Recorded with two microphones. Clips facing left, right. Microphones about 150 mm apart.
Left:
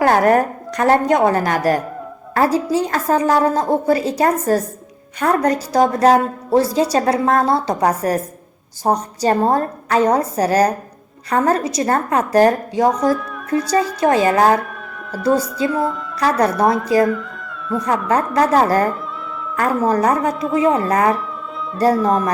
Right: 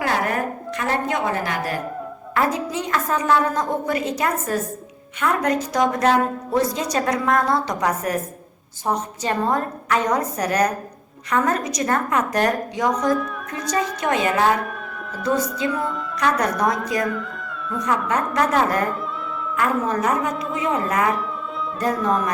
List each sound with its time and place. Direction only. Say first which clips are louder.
0.0 s a woman's voice: left 9 dB; 45° left (ahead or behind); by 16.7 s 30° left (ahead or behind)
17.8 s a woman's voice: left 4 dB; 35° left (ahead or behind)